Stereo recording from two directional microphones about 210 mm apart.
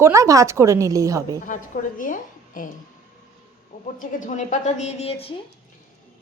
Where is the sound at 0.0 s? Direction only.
15° right (ahead or behind).